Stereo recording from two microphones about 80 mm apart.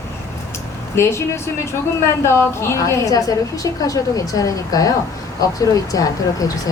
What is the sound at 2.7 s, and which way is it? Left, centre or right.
A woman's voice, left.